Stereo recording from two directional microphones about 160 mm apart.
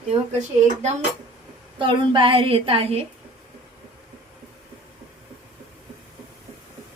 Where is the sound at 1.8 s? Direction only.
30° right (ahead or behind).